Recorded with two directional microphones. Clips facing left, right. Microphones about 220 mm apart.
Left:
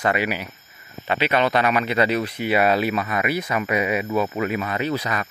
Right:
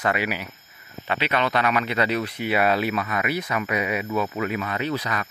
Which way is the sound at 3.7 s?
5° left (ahead or behind).